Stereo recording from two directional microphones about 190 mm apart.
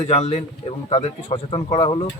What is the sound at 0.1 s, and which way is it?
Speech, 35° left (ahead or behind).